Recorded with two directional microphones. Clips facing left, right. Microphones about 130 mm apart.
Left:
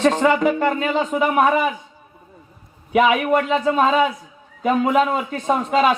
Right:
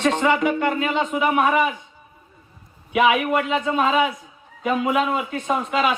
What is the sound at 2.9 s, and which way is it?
A man's voice, 40° left (ahead or behind).